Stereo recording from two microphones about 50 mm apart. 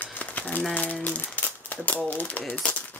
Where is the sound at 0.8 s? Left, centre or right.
Left.